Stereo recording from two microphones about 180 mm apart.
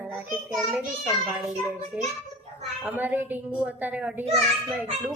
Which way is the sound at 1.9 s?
5° right (ahead or behind).